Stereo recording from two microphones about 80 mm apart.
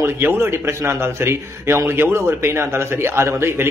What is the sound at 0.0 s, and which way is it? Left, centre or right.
A man's voice, right.